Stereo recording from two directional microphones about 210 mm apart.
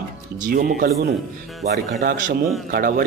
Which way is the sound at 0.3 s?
40° right (ahead or behind).